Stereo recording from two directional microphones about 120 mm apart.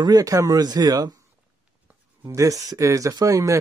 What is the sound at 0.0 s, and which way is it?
Speech, 30° right (ahead or behind).